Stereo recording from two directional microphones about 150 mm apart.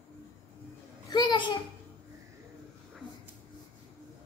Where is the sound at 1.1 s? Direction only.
30° left (ahead or behind).